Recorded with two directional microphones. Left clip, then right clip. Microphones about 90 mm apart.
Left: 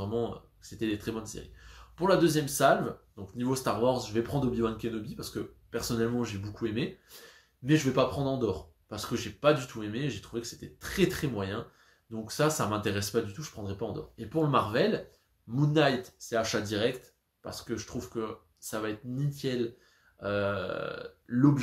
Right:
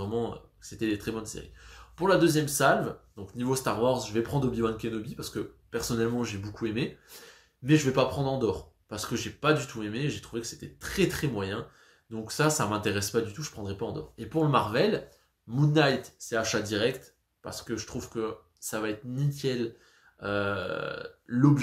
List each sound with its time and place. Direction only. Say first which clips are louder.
0.0 s speech: right 1 dB; 30° right (ahead or behind)